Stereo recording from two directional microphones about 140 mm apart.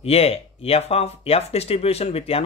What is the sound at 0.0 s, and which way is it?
Speech, 45° left (ahead or behind).